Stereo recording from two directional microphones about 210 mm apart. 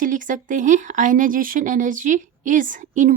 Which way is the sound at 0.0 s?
40° right (ahead or behind).